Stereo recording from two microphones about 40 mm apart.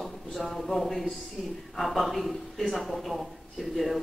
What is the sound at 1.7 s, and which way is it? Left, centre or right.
Speech, centre.